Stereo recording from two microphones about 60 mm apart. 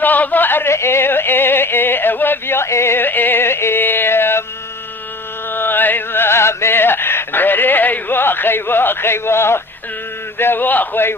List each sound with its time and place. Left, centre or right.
0.0 s a sound: left
0.7 s yodeling: left
5.5 s music: left
10.3 s a man's voice: left